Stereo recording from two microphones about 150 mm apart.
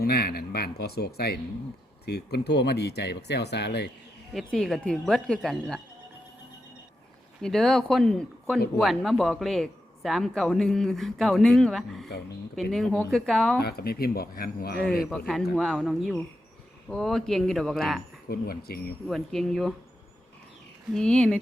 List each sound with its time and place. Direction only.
0.0 s speech: 90° left
4.4 s a man's voice: centre (ahead or behind)
7.4 s a man's voice: 5° left (ahead or behind)
13.6 s speech: 90° left
15.5 s a man's voice: centre (ahead or behind)
18.3 s speech: 90° left
19.0 s a man's voice: centre (ahead or behind)
20.9 s a man's voice: 5° left (ahead or behind)